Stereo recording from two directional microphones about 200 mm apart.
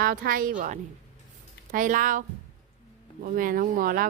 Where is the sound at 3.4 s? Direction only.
45° right (ahead or behind).